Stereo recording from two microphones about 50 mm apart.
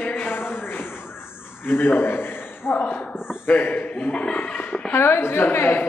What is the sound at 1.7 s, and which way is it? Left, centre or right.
A man's voice, left.